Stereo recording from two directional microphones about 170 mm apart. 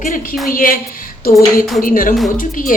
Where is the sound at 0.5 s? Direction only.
55° left (ahead or behind).